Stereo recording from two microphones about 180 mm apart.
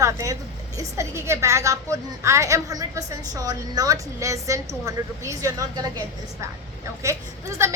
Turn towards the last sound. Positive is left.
turn(degrees=-15)  # may be behind; listen again after turning